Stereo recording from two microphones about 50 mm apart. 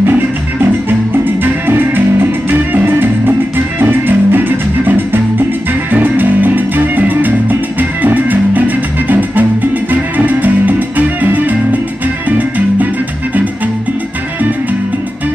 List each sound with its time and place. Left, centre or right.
0.8 s music: right